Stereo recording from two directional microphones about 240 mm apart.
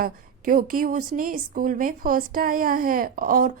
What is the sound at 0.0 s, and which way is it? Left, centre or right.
A woman's voice, right.